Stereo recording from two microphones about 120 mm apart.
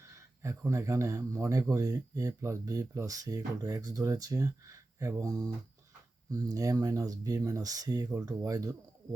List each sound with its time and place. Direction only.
0.4 s speech: 25° right (ahead or behind)